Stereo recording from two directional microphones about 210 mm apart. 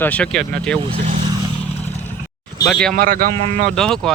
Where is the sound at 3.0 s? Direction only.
40° right (ahead or behind).